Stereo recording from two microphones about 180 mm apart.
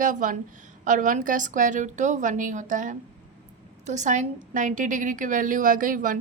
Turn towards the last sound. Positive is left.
turn(degrees=-50)  # may be behind; listen again after turning